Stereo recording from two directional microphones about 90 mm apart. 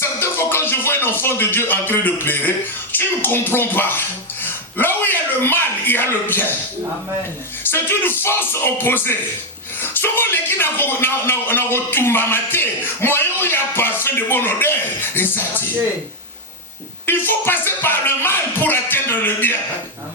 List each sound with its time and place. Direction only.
0.0 s music: 25° left (ahead or behind)
2.9 s speech: 20° left (ahead or behind)
7.7 s speech: 25° left (ahead or behind)
17.1 s speech: 25° left (ahead or behind)